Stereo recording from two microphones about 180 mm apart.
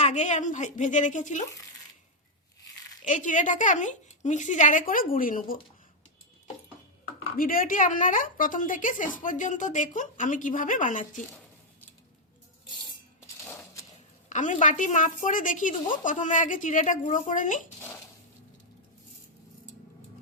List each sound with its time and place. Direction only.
0.0 s a woman's voice: 40° left (ahead or behind)
3.0 s a woman's voice: 45° left (ahead or behind)
7.3 s a woman's voice: 50° left (ahead or behind)
13.4 s a sound: 10° left (ahead or behind)
14.3 s a woman's voice: 40° left (ahead or behind)